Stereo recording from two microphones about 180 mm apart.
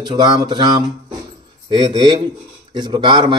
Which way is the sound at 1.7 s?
25° right (ahead or behind).